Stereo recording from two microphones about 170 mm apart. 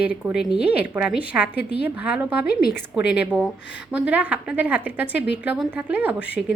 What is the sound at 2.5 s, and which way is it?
Speech, 65° left (ahead or behind).